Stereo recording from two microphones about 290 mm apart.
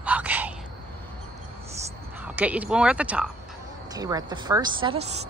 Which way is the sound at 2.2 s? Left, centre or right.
Centre.